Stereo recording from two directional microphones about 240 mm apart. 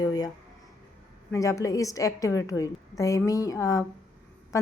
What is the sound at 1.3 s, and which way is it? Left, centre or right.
Speech, centre.